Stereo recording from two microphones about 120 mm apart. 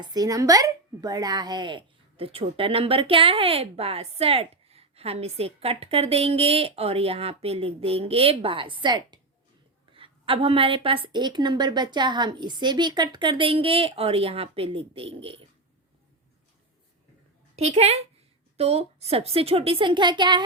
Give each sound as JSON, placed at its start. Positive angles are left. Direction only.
{"t": 0.0, "sound": "speech", "side_deg": -30}
{"t": 17.6, "sound": "a woman's voice", "side_deg": -60}